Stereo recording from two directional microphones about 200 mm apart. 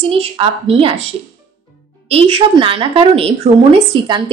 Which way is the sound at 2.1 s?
25° right (ahead or behind).